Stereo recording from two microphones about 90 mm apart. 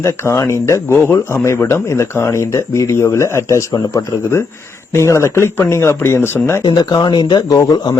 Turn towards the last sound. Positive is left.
turn(degrees=45)  # may be behind; listen again after turning